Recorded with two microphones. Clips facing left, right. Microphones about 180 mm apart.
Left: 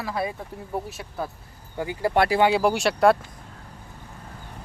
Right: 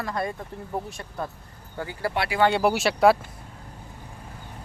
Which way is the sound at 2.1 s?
45° left (ahead or behind).